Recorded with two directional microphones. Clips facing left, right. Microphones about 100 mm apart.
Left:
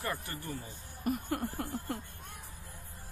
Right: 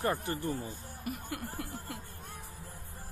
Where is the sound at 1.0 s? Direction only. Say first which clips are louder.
Left 6 dB; 40° left (ahead or behind).